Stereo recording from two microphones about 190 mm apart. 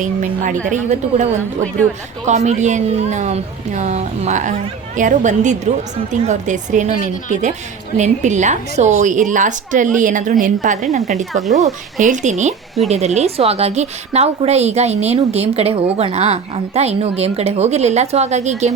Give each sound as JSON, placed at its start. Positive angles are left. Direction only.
{"t": 0.0, "sound": "a woman's voice", "side_deg": -40}
{"t": 11.3, "sound": "speech", "side_deg": 0}
{"t": 11.6, "sound": "a woman's voice", "side_deg": -40}